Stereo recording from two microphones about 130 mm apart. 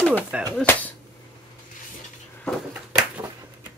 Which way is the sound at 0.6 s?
10° left (ahead or behind).